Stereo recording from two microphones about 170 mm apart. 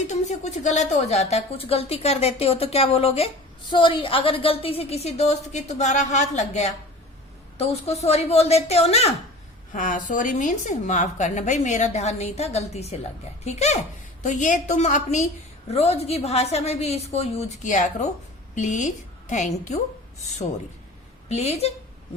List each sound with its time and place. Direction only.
0.1 s a woman's voice: 45° left (ahead or behind)
9.7 s a woman's voice: 50° left (ahead or behind)
21.2 s a woman's voice: 40° left (ahead or behind)